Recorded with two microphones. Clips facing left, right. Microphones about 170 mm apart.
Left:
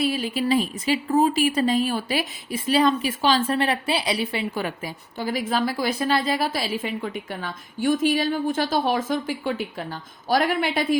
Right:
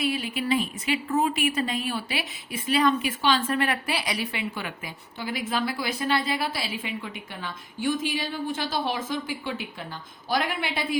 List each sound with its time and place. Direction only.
0.0 s a woman's voice: 35° left (ahead or behind)